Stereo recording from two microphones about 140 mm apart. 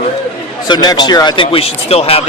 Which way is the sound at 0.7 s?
30° left (ahead or behind).